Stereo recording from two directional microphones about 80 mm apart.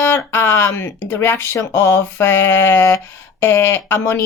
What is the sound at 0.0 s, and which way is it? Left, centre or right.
Speech, left.